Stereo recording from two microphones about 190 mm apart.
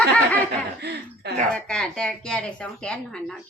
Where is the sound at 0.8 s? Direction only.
60° right (ahead or behind).